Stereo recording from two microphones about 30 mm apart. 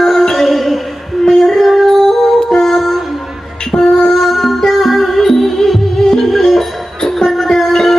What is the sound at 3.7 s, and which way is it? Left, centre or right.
Music, centre.